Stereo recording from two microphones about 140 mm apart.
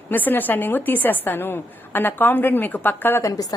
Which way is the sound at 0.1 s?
15° left (ahead or behind).